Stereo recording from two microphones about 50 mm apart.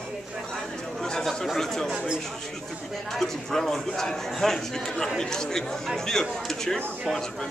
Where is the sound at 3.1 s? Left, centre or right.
Centre.